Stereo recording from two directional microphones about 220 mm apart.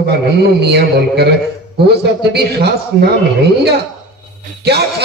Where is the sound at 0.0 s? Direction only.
50° right (ahead or behind).